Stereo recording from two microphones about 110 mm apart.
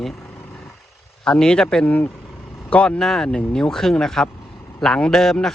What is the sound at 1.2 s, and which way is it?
A man's voice, 5° left (ahead or behind).